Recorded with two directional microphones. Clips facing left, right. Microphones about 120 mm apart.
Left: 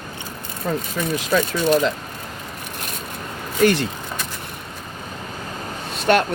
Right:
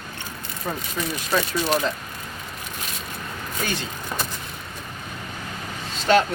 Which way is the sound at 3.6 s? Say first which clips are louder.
Left 13 dB; 65° left (ahead or behind).